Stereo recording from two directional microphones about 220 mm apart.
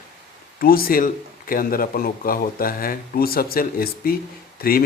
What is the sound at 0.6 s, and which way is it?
Speech, 40° left (ahead or behind).